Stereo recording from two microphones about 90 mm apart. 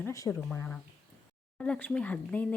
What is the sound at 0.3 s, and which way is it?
Speech, 15° left (ahead or behind).